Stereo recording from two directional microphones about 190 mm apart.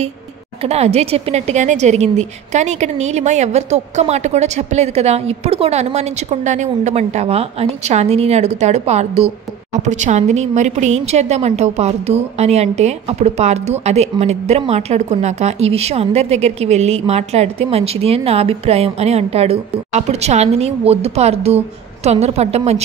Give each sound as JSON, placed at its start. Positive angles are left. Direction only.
{"t": 0.6, "sound": "a woman's voice", "side_deg": -35}